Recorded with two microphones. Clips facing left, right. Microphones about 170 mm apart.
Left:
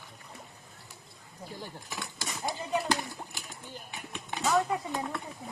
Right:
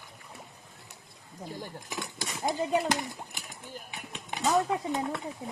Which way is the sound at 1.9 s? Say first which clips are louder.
Right 2 dB; 15° right (ahead or behind).